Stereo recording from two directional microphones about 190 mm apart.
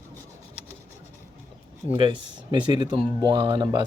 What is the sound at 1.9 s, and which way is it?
Speech, 25° right (ahead or behind).